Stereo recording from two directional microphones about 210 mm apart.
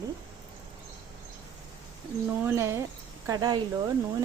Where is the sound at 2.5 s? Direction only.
10° right (ahead or behind).